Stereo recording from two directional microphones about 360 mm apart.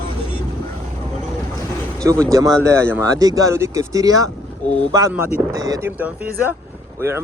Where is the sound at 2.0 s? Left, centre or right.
Centre.